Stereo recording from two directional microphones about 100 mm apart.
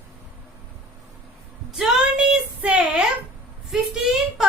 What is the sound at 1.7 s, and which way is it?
Female singing, 5° right (ahead or behind).